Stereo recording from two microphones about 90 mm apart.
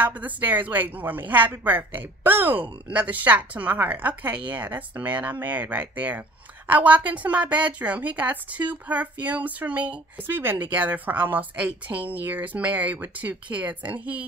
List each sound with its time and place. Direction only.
0.0 s a woman's voice: 20° right (ahead or behind)